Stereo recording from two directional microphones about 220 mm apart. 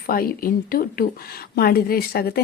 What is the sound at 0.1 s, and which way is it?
A woman's voice, 40° left (ahead or behind).